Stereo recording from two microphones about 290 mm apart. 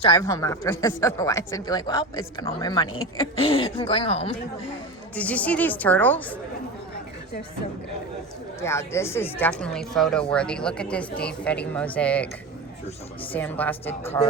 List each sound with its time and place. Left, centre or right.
0.0 s speech: centre
5.1 s a woman's voice: centre
8.6 s a woman's voice: centre
13.3 s speech: centre